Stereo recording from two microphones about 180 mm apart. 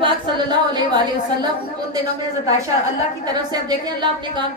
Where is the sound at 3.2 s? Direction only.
20° right (ahead or behind).